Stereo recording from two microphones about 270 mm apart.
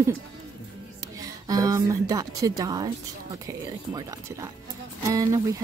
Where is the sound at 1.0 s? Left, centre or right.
Centre.